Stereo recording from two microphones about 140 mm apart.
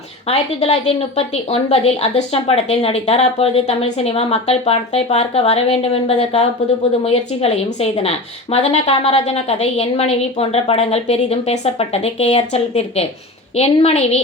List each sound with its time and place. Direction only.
0.3 s a woman's voice: 45° left (ahead or behind)